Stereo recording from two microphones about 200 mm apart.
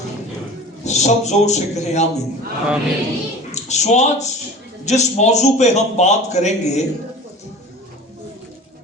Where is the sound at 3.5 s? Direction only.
35° left (ahead or behind).